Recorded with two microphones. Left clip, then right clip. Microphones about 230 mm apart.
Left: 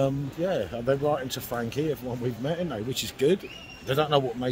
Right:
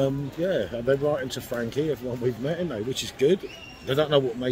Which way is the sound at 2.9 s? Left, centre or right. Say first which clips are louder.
Right 2 dB; left.